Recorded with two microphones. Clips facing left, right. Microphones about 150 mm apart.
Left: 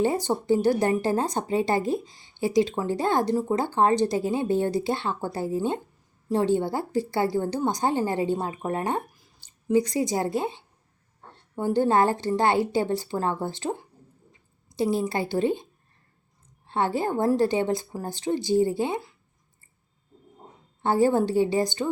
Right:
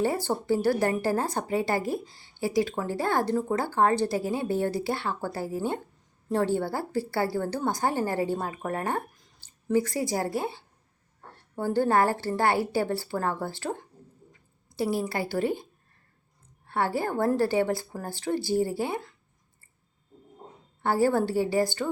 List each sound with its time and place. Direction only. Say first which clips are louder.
0.0 s speech: left 3 dB; 20° left (ahead or behind)
9.1 s a sound: left 1 dB; 5° left (ahead or behind)
9.7 s speech: left 3 dB; 20° left (ahead or behind)
16.6 s speech: left 2 dB; 20° left (ahead or behind)
20.8 s speech: left 2 dB; 20° left (ahead or behind)